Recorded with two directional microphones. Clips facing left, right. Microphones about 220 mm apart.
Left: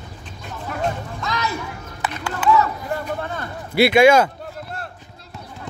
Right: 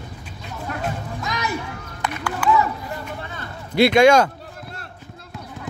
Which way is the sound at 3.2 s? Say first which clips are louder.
Left 6 dB; 50° left (ahead or behind).